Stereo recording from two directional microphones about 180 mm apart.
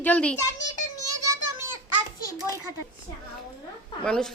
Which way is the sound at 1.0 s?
20° right (ahead or behind).